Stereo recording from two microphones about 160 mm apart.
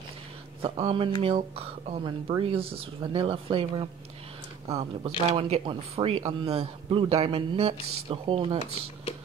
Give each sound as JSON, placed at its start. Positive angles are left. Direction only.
{"t": 0.6, "sound": "speech", "side_deg": -35}